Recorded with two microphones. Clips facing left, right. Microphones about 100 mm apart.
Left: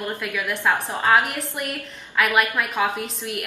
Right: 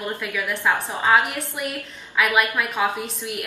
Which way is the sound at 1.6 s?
10° right (ahead or behind).